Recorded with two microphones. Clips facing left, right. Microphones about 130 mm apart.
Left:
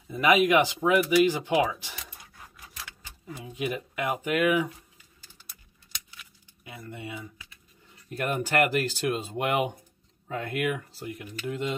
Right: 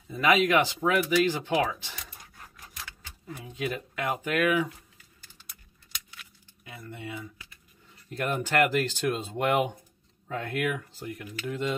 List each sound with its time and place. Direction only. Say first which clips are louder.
0.1 s a sound: left 2 dB; 15° left (ahead or behind)
3.5 s speech: left 1 dB; 15° left (ahead or behind)
6.6 s speech: left 1 dB; 15° left (ahead or behind)